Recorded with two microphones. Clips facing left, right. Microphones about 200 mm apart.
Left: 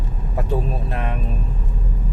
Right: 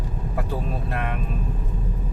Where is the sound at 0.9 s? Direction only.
20° left (ahead or behind).